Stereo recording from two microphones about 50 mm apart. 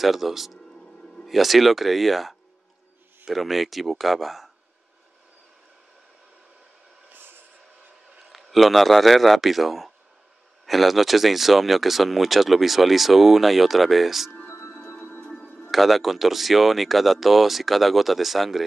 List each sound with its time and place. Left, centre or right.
0.0 s speech: centre
7.1 s a sound: right
8.3 s speech: centre
15.0 s music: left
15.7 s speech: centre